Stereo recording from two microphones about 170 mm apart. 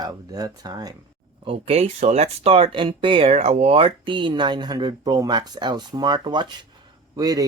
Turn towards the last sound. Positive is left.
turn(degrees=-20)  # may be behind; listen again after turning